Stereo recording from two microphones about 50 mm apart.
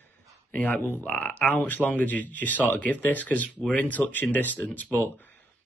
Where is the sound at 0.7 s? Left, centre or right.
Left.